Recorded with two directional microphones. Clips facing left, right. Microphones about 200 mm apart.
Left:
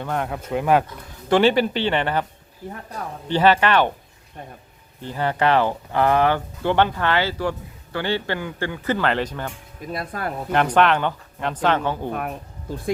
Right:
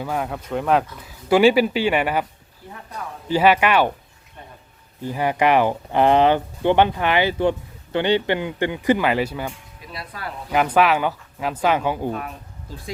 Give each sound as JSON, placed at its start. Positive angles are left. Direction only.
{"t": 0.0, "sound": "speech", "side_deg": -5}
{"t": 3.2, "sound": "speech", "side_deg": -10}
{"t": 5.0, "sound": "speech", "side_deg": -10}
{"t": 9.8, "sound": "speech", "side_deg": 50}
{"t": 10.5, "sound": "speech", "side_deg": -5}